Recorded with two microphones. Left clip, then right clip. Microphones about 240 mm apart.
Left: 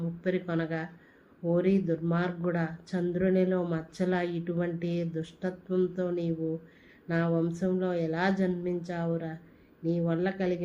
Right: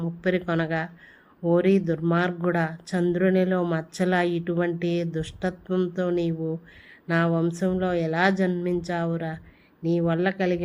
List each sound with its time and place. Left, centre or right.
0.0 s speech: right